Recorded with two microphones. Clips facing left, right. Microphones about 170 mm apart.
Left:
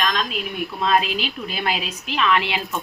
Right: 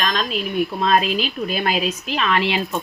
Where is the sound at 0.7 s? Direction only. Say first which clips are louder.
Even; 45° right (ahead or behind).